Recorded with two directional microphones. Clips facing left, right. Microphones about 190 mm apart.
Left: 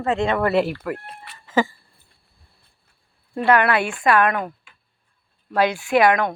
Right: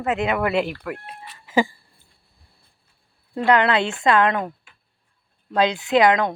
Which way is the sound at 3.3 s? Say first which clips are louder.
Even; 20° right (ahead or behind).